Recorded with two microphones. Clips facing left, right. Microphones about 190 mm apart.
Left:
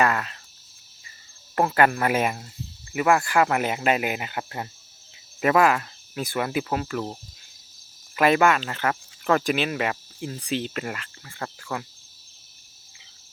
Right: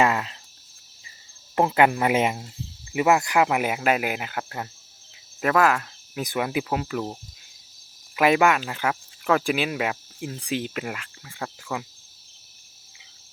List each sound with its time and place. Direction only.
0.0 s speech: 20° right (ahead or behind)
1.5 s speech: 15° right (ahead or behind)
3.8 s cricket: 5° right (ahead or behind)
5.4 s speech: 5° left (ahead or behind)
6.2 s speech: 10° right (ahead or behind)